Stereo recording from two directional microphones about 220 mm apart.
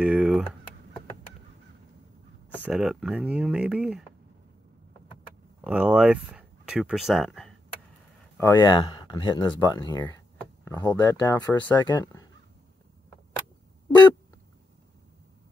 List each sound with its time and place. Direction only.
0.0 s typing: 5° right (ahead or behind)
2.7 s speech: 5° right (ahead or behind)
5.6 s speech: 5° right (ahead or behind)
8.4 s speech: 10° left (ahead or behind)